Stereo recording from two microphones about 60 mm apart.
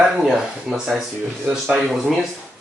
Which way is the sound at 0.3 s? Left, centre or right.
Centre.